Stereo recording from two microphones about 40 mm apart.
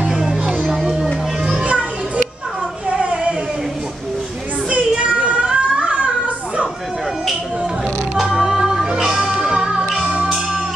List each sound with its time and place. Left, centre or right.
0.1 s music: centre
1.4 s music: right
3.0 s a sound: right
4.6 s child singing: right
8.3 s music: centre
9.4 s music: centre